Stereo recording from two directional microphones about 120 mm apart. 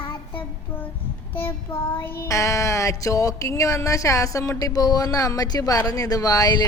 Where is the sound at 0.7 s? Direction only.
15° left (ahead or behind).